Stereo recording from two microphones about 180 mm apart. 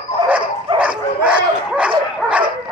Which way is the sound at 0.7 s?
5° right (ahead or behind).